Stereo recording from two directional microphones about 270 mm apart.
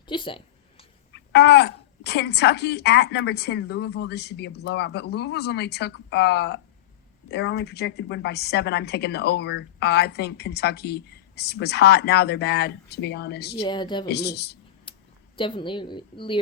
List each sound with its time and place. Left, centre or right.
0.1 s a sound: centre
1.1 s a woman's voice: left
13.6 s a woman's voice: centre
14.1 s a woman's voice: left
14.9 s a sound: centre
15.4 s a woman's voice: centre